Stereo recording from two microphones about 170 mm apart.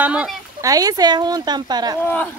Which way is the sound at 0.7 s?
20° right (ahead or behind).